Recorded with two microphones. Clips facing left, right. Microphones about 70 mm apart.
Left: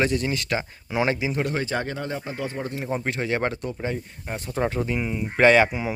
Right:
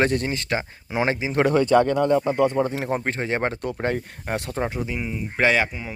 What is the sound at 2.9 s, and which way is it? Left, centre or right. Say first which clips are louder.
Speech: left 3 dB; right.